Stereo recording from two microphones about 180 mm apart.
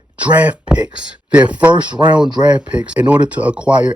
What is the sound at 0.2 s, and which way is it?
Speech, 10° right (ahead or behind).